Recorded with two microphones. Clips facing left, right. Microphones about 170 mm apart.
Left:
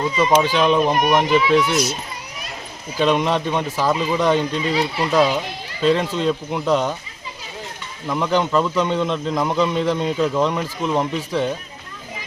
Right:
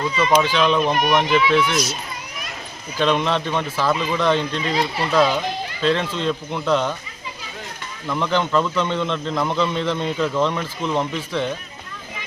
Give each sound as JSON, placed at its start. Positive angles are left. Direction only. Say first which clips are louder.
{"t": 0.5, "sound": "speech", "louder": "left 2 dB", "side_deg": 10}
{"t": 0.9, "sound": "speech", "louder": "left 2 dB", "side_deg": 40}
{"t": 3.0, "sound": "speech", "louder": "left 2 dB", "side_deg": 10}
{"t": 8.0, "sound": "speech", "louder": "left 2 dB", "side_deg": 10}